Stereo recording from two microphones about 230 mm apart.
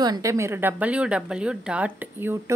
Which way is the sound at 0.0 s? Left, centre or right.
Centre.